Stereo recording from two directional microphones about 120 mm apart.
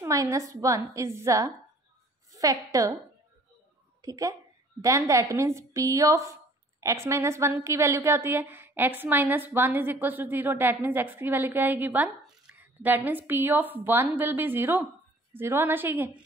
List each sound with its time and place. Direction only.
0.0 s a woman's voice: 25° right (ahead or behind)
4.0 s a woman's voice: 30° right (ahead or behind)